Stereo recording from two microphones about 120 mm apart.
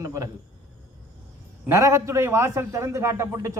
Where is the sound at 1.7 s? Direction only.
25° right (ahead or behind).